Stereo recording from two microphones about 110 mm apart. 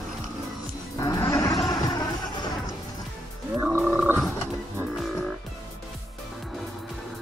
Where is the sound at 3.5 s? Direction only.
10° right (ahead or behind).